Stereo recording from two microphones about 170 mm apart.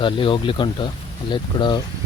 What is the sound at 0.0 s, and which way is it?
Speech, 30° left (ahead or behind).